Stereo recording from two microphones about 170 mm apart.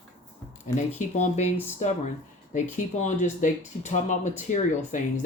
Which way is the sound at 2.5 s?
45° left (ahead or behind).